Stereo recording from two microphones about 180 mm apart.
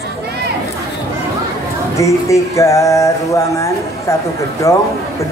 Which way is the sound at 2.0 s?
15° left (ahead or behind).